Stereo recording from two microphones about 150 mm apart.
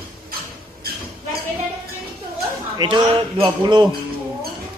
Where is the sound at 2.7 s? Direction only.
30° right (ahead or behind).